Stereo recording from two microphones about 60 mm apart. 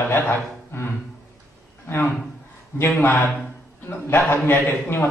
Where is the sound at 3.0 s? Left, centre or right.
Left.